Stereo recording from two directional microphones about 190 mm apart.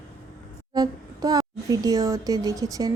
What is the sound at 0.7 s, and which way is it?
Speech, 20° right (ahead or behind).